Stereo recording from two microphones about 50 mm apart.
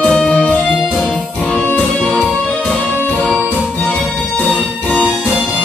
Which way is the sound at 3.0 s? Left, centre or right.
Left.